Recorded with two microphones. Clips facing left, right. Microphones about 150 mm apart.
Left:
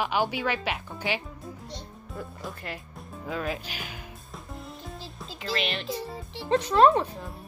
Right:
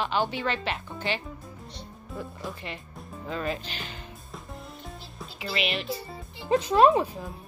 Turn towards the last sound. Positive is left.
turn(degrees=-5)  # may be behind; listen again after turning